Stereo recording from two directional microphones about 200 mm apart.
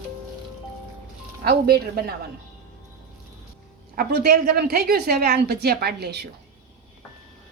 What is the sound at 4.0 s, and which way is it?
A woman's voice, 50° right (ahead or behind).